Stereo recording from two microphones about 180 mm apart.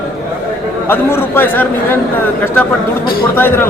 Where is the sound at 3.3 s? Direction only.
10° left (ahead or behind).